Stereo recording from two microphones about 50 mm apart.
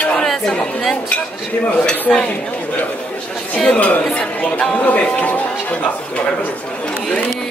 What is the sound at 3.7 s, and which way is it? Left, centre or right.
Speech, left.